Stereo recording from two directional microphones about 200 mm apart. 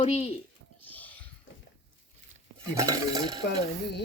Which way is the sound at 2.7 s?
15° right (ahead or behind).